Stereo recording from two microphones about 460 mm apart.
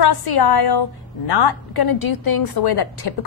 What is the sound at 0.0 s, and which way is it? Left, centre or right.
A woman's voice, left.